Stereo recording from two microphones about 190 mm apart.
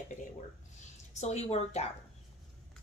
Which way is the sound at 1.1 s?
35° left (ahead or behind).